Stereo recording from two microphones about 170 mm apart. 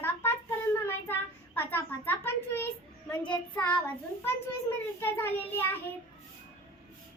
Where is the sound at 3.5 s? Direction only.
5° left (ahead or behind).